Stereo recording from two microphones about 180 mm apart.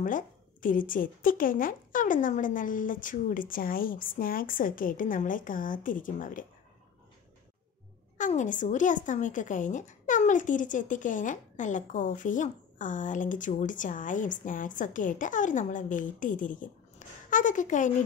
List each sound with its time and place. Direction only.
0.0 s a woman's voice: 50° left (ahead or behind)
8.2 s a woman's voice: 45° left (ahead or behind)